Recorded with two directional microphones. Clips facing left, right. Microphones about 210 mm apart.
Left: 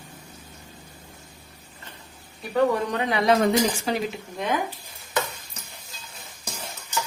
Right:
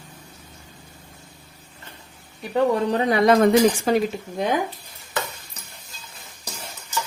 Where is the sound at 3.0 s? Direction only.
45° right (ahead or behind).